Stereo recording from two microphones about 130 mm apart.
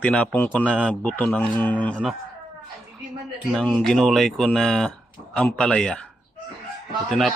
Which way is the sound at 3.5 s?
5° left (ahead or behind).